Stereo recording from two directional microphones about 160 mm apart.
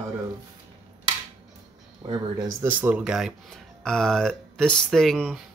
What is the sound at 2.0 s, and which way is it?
Speech, 25° right (ahead or behind).